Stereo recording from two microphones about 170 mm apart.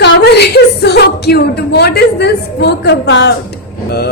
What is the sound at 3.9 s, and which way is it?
Speech, 70° left (ahead or behind).